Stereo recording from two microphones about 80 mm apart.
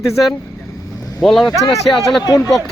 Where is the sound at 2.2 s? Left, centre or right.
Left.